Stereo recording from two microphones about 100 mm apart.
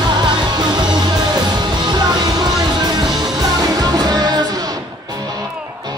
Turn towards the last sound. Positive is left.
turn(degrees=-40)  # may be behind; listen again after turning